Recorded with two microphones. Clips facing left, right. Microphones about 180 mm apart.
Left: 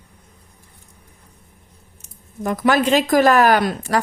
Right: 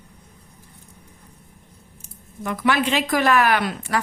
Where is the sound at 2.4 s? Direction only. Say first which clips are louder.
Left 4 dB; 40° left (ahead or behind).